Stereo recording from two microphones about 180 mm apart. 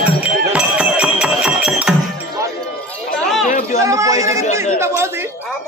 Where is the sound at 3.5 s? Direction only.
45° left (ahead or behind).